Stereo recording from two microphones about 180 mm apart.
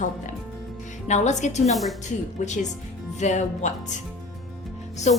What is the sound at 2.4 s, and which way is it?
A woman's voice, 45° left (ahead or behind).